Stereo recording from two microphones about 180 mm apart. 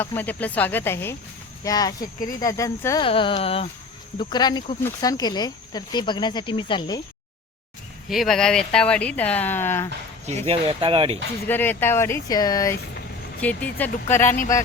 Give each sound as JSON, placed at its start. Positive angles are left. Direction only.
{"t": 0.0, "sound": "speech", "side_deg": 10}
{"t": 3.1, "sound": "speech", "side_deg": 30}
{"t": 4.2, "sound": "speech", "side_deg": 25}
{"t": 8.1, "sound": "speech", "side_deg": 0}
{"t": 10.2, "sound": "speech", "side_deg": -35}
{"t": 11.4, "sound": "speech", "side_deg": 10}
{"t": 13.4, "sound": "speech", "side_deg": 10}